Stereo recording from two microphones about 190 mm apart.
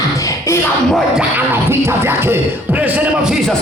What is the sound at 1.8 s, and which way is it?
Speech, 10° right (ahead or behind).